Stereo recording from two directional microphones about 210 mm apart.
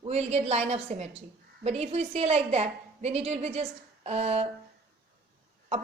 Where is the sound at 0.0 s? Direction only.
30° right (ahead or behind).